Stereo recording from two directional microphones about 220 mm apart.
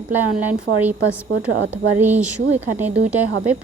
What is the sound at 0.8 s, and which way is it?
Speech, 5° right (ahead or behind).